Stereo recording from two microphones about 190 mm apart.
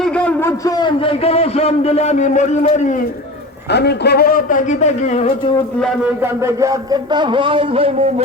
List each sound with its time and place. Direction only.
0.0 s a man's voice: 5° left (ahead or behind); by 3.0 s 40° left (ahead or behind)
3.7 s a man's voice: 60° left (ahead or behind); by 5.3 s 35° left (ahead or behind)
6.2 s speech: 15° right (ahead or behind); by 8.0 s 30° right (ahead or behind)